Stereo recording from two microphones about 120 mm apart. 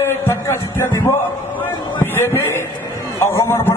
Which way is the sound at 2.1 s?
20° left (ahead or behind).